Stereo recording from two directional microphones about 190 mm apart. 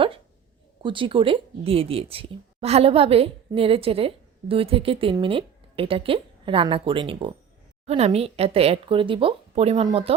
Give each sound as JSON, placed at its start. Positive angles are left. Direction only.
{"t": 0.8, "sound": "speech", "side_deg": -25}